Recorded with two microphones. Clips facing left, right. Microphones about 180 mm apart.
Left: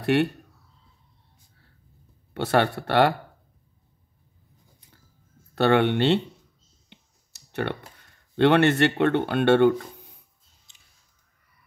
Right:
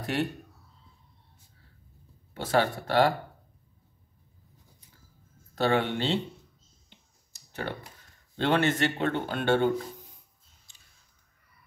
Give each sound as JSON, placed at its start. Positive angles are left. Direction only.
{"t": 0.0, "sound": "speech", "side_deg": 65}
{"t": 2.3, "sound": "speech", "side_deg": 65}
{"t": 5.5, "sound": "speech", "side_deg": 65}
{"t": 6.9, "sound": "clicking", "side_deg": 70}
{"t": 8.4, "sound": "speech", "side_deg": 65}